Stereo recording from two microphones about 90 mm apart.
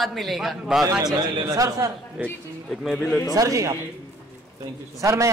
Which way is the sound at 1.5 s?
40° right (ahead or behind).